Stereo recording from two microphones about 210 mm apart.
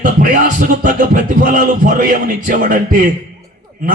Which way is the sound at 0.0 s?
40° right (ahead or behind).